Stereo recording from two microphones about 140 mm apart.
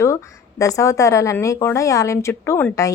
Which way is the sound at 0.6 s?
25° left (ahead or behind).